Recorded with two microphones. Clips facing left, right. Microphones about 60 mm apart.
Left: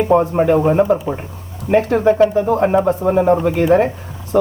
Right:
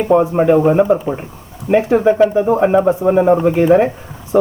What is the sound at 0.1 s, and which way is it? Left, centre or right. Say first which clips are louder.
Speech: right 4 dB; centre.